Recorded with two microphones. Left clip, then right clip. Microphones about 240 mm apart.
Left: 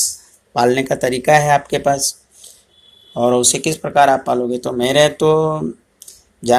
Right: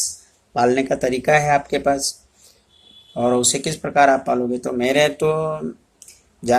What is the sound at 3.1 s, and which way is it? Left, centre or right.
Speech, centre.